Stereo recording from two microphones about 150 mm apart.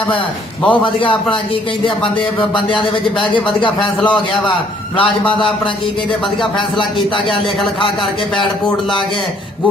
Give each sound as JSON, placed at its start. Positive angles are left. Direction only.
{"t": 0.7, "sound": "speech", "side_deg": 35}
{"t": 2.6, "sound": "speech", "side_deg": 35}